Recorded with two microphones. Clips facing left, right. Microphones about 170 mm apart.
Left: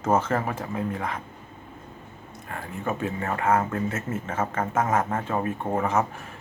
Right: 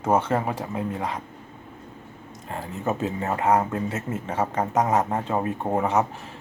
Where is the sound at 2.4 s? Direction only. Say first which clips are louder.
Right 3 dB; 20° right (ahead or behind).